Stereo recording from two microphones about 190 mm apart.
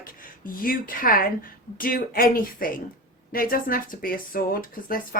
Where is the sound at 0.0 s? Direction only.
50° left (ahead or behind).